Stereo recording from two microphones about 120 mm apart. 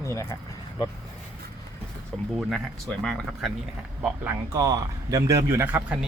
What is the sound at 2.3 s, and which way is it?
Speech, 5° right (ahead or behind).